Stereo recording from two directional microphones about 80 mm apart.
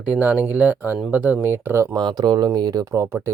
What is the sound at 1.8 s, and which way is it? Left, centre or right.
Speech, right.